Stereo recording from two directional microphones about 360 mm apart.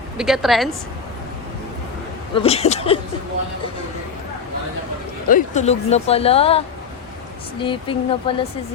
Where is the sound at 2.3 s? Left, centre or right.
Centre.